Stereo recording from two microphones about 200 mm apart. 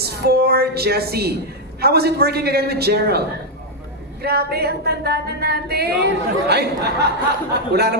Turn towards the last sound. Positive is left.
turn(degrees=-55)  # may be behind; listen again after turning